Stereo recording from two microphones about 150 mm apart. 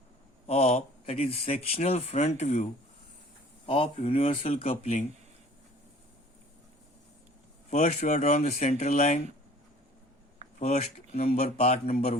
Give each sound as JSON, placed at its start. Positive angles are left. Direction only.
{"t": 0.4, "sound": "speech", "side_deg": 45}
{"t": 3.7, "sound": "speech", "side_deg": 40}
{"t": 7.7, "sound": "speech", "side_deg": 50}
{"t": 10.6, "sound": "speech", "side_deg": 45}